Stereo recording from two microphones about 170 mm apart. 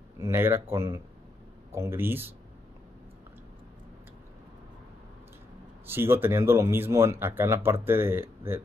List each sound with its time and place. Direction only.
0.2 s speech: 15° right (ahead or behind)
5.9 s speech: 15° right (ahead or behind)